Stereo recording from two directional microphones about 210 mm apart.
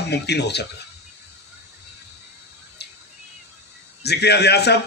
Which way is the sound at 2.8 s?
50° left (ahead or behind).